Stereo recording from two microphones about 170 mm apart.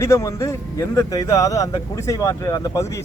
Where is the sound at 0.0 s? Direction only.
20° left (ahead or behind).